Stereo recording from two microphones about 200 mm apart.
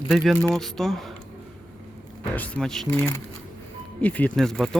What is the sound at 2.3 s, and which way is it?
Speech, 5° left (ahead or behind).